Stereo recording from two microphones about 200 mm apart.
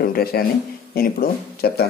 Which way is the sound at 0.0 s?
50° left (ahead or behind).